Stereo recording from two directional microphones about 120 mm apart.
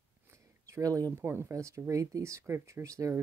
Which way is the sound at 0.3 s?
25° right (ahead or behind).